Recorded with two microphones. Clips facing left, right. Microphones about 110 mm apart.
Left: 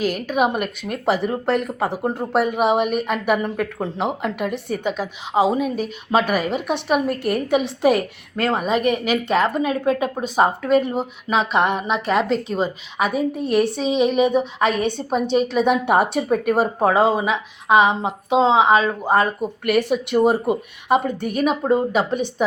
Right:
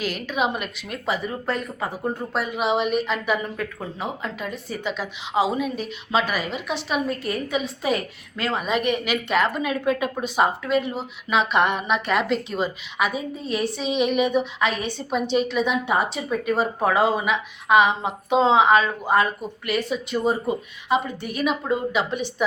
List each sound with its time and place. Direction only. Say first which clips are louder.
0.0 s a woman's voice: left 5 dB; 50° left (ahead or behind); by 2.2 s 75° left (ahead or behind)
2.3 s a woman's voice: left 6 dB; 55° left (ahead or behind)
13.1 s speech: left 8 dB; 65° left (ahead or behind)
13.8 s a woman's voice: left 4 dB; 35° left (ahead or behind); by 16.6 s 55° left (ahead or behind)
16.8 s a woman's voice: left 3 dB; 35° left (ahead or behind)
19.6 s speech: left 6 dB; 65° left (ahead or behind)
20.5 s a woman's voice: left 4 dB; 55° left (ahead or behind)